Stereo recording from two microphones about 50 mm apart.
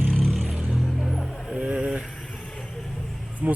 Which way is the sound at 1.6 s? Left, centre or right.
Right.